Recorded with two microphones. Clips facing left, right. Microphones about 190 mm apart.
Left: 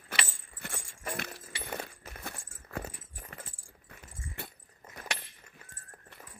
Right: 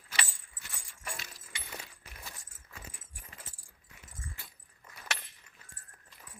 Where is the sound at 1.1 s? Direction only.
60° left (ahead or behind).